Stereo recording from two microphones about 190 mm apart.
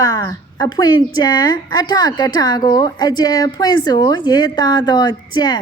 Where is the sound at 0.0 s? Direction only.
20° left (ahead or behind).